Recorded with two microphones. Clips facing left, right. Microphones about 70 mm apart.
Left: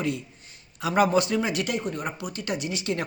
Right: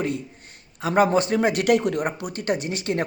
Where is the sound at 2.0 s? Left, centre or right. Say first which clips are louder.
Right 5 dB; right.